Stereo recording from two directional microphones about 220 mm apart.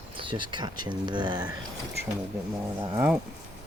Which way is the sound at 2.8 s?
10° right (ahead or behind).